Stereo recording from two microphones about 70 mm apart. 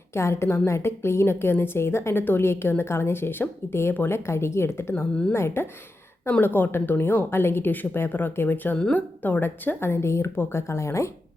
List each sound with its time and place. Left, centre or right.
0.1 s a woman's voice: left